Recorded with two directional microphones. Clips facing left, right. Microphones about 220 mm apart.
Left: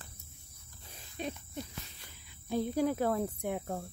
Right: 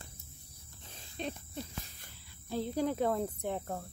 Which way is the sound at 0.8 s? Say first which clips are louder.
Left 1 dB; 10° left (ahead or behind).